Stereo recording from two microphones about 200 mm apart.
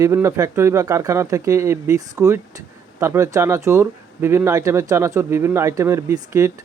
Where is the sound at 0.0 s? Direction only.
15° right (ahead or behind).